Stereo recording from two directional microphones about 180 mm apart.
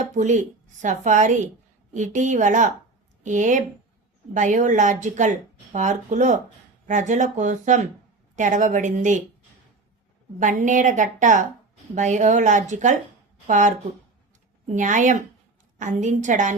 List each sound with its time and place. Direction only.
0.0 s a woman's voice: 40° right (ahead or behind)
10.4 s a woman's voice: 45° right (ahead or behind)
14.8 s a woman's voice: 45° right (ahead or behind)